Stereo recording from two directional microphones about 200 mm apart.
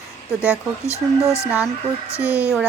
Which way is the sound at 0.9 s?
15° left (ahead or behind).